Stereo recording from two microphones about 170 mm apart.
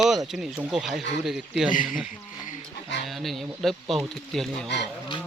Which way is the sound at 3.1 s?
Centre (ahead or behind).